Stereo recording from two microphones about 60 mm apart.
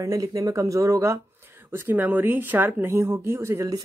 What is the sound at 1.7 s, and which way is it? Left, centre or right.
Speech, right.